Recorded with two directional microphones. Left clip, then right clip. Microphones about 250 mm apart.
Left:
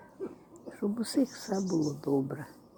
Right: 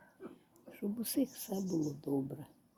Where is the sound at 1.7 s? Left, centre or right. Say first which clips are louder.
Left 6 dB; centre.